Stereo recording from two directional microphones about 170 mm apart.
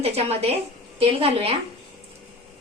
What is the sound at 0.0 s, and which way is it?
A woman's voice, 35° right (ahead or behind).